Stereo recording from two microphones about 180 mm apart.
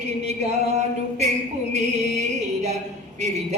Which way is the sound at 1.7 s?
40° right (ahead or behind).